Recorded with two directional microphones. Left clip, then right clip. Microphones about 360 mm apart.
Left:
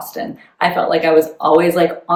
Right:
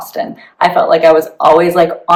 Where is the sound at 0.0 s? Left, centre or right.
Centre.